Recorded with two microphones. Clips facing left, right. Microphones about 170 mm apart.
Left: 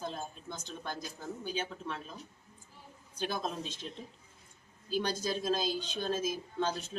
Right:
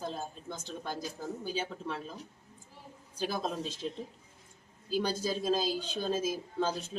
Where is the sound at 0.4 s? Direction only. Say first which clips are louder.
Right 2 dB; 30° right (ahead or behind).